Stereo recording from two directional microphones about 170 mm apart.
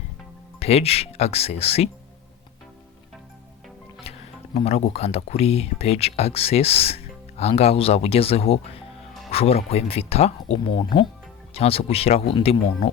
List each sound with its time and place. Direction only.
0.6 s speech: 35° left (ahead or behind)
4.1 s music: 35° left (ahead or behind)
4.5 s speech: 35° left (ahead or behind)